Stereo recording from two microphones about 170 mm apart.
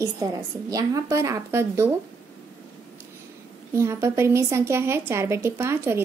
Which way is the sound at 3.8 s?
15° right (ahead or behind).